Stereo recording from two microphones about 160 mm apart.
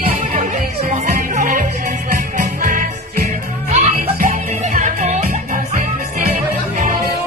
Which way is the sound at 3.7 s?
50° right (ahead or behind).